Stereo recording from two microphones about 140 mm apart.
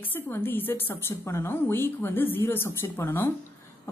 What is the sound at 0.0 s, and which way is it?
A woman's voice, 15° left (ahead or behind).